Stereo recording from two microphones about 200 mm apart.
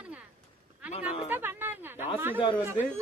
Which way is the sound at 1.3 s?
10° right (ahead or behind).